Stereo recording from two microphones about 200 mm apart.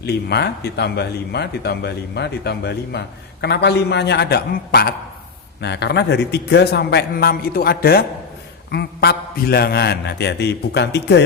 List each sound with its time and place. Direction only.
0.0 s speech: 55° left (ahead or behind)